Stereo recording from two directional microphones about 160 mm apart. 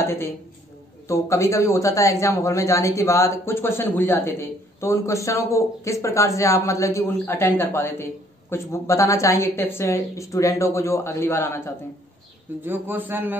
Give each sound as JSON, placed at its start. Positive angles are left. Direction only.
{"t": 0.0, "sound": "a man's voice", "side_deg": 15}
{"t": 12.6, "sound": "a man's voice", "side_deg": -10}